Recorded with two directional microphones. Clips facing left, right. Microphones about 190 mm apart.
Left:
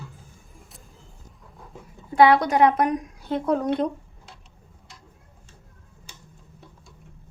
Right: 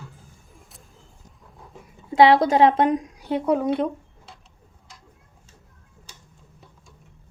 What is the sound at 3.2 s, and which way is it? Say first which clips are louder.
Speech: right 1 dB; 10° right (ahead or behind).